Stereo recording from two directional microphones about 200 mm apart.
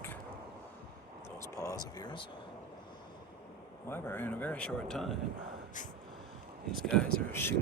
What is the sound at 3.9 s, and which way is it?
A man's voice, 10° left (ahead or behind).